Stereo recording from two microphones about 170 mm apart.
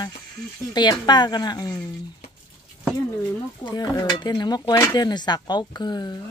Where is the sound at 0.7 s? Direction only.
25° left (ahead or behind).